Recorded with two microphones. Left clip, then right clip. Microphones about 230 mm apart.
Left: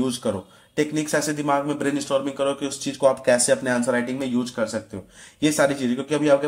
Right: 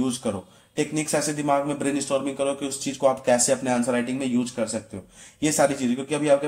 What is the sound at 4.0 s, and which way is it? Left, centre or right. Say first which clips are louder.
Speech: left 1 dB; left.